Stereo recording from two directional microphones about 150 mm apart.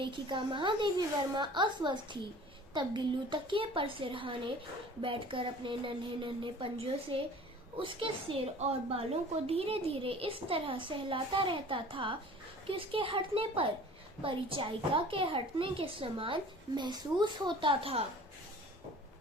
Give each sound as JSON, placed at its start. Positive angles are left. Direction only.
{"t": 0.0, "sound": "a woman's voice", "side_deg": -35}